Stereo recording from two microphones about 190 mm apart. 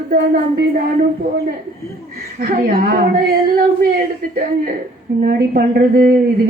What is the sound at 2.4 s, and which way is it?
Speech, 50° right (ahead or behind).